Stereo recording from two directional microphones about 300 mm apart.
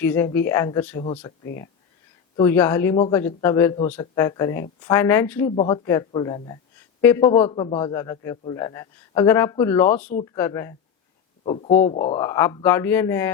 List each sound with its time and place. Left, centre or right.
0.0 s a man's voice: centre
2.3 s a man's voice: centre
11.4 s a man's voice: left